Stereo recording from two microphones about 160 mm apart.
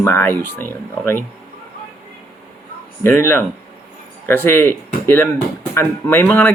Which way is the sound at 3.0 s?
15° left (ahead or behind).